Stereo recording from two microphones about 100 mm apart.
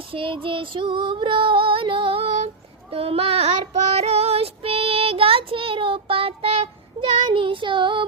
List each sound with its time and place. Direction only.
0.1 s female singing: 60° right (ahead or behind)
2.9 s a child's voice: 75° right (ahead or behind)
3.9 s child singing: 90° right; by 8.0 s 55° right (ahead or behind)